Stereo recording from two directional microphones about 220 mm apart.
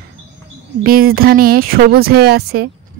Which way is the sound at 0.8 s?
40° right (ahead or behind).